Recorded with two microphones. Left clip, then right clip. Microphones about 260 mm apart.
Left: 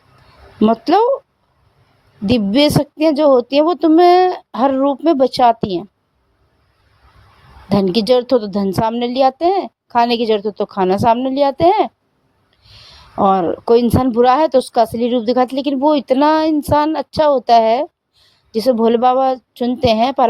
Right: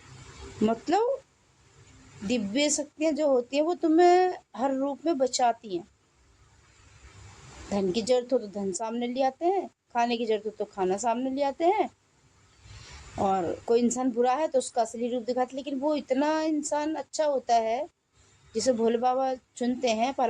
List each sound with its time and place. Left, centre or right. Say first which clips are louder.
0.6 s speech: left 13 dB; left
2.2 s speech: left 14 dB; left
7.7 s a woman's voice: left 12 dB; left
13.1 s a woman's voice: left 13 dB; left